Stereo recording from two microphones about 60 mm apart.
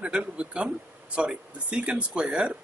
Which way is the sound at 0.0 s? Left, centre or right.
Centre.